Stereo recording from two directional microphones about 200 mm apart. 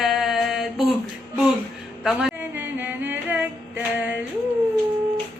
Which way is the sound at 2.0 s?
Centre (ahead or behind).